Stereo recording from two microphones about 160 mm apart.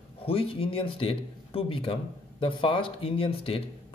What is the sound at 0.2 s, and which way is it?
A man's voice, 35° left (ahead or behind).